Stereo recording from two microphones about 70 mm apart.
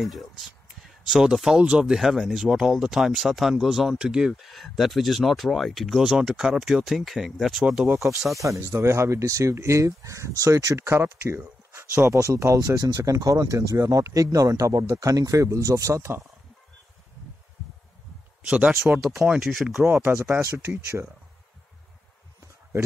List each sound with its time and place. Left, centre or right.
0.0 s speech: centre
8.4 s speech: right
18.4 s speech: centre
19.4 s speech: centre
20.0 s speech: right